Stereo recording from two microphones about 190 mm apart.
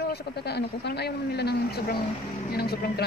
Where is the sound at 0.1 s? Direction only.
60° left (ahead or behind).